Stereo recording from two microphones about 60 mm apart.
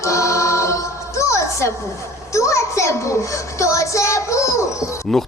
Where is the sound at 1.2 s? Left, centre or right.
Left.